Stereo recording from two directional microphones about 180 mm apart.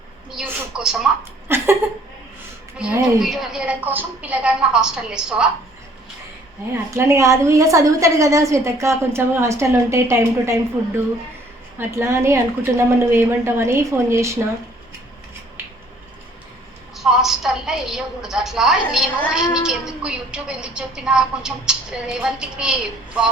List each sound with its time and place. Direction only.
0.3 s a woman's voice: 5° right (ahead or behind)
1.5 s a sound: 15° right (ahead or behind)
2.7 s a woman's voice: 5° right (ahead or behind)
6.9 s a woman's voice: 15° right (ahead or behind)
11.8 s a woman's voice: 15° right (ahead or behind)
17.0 s a woman's voice: centre (ahead or behind)